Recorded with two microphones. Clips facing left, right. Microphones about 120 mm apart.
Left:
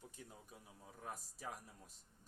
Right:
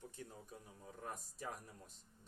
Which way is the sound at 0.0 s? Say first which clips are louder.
Right 4 dB; 15° left (ahead or behind).